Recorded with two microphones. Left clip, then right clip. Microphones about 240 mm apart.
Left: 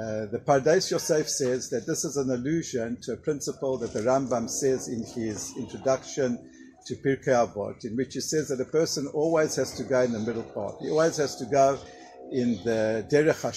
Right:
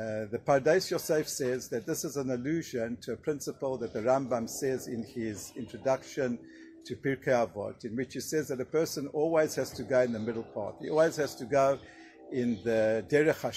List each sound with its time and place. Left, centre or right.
0.0 s speech: right